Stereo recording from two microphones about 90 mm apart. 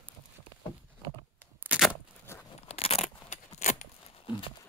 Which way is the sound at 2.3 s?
30° left (ahead or behind).